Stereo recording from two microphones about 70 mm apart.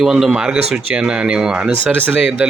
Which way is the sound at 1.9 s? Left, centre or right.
Right.